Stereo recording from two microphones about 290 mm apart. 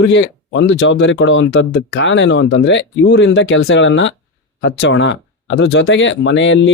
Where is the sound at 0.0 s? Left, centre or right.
Left.